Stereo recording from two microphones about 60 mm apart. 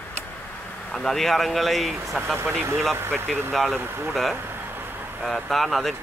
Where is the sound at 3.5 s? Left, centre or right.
Centre.